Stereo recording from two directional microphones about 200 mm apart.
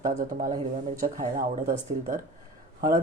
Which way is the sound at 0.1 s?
40° right (ahead or behind).